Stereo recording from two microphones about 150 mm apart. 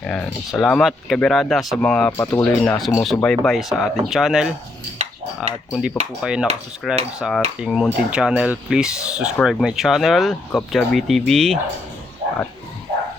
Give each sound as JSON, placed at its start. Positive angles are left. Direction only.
{"t": 0.0, "sound": "speech", "side_deg": 10}
{"t": 2.1, "sound": "speech", "side_deg": 20}
{"t": 2.4, "sound": "speech", "side_deg": 5}